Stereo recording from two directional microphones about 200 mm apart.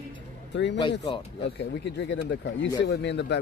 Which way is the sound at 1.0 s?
25° left (ahead or behind).